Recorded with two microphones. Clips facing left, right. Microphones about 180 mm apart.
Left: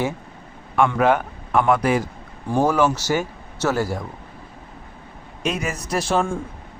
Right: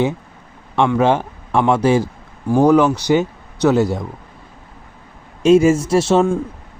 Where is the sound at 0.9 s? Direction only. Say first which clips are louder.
Right 3 dB; 25° right (ahead or behind).